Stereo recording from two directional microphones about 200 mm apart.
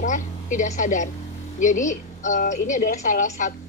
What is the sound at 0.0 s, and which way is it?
A woman's voice, 40° left (ahead or behind).